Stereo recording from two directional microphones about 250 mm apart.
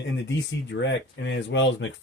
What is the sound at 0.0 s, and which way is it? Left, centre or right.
Speech, left.